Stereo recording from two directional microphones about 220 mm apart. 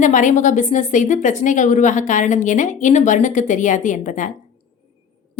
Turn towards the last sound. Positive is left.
turn(degrees=35)  # may be behind; listen again after turning